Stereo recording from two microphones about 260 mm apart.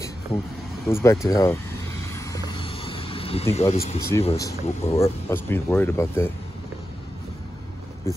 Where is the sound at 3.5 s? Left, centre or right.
Left.